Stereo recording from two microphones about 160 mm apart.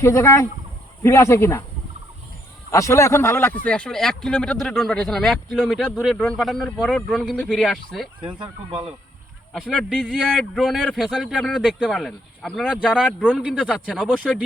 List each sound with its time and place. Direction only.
0.0 s speech: 15° left (ahead or behind)
2.7 s speech: 20° left (ahead or behind); by 8.1 s centre (ahead or behind)
9.5 s speech: centre (ahead or behind)